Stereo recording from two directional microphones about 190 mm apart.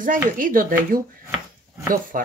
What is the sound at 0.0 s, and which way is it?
A woman's voice, 45° right (ahead or behind).